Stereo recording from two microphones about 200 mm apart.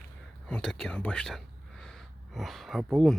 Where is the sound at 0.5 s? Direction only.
Centre (ahead or behind).